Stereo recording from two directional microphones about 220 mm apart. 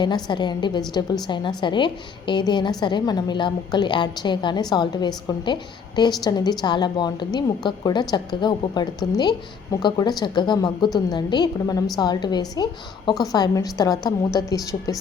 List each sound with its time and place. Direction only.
0.0 s a woman's voice: 20° left (ahead or behind)